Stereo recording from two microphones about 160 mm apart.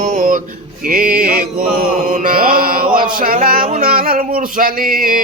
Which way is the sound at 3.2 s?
65° right (ahead or behind).